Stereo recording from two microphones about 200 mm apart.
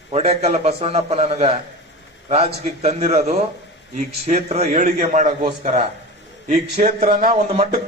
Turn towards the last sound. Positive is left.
turn(degrees=-35)  # may be behind; listen again after turning